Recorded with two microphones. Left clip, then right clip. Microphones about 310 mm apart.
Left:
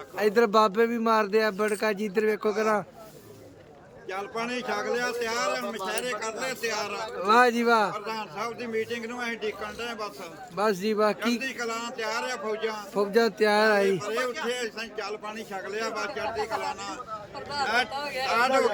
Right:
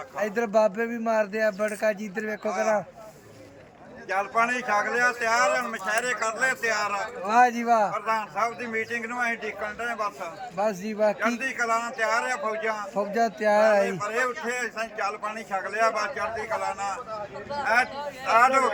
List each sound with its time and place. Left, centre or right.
0.2 s speech: centre
4.1 s a man's voice: centre
7.3 s speech: centre
7.9 s a man's voice: centre
10.6 s speech: centre
11.3 s a man's voice: centre
13.1 s a man's voice: centre
17.5 s speech: left
18.3 s a man's voice: centre